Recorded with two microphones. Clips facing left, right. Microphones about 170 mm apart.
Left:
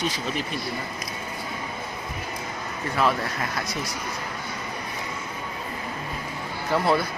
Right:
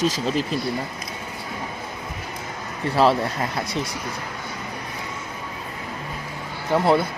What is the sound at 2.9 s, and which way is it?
Speech, 30° right (ahead or behind).